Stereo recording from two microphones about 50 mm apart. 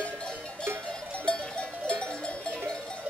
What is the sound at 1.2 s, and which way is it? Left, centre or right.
Cowbell, left.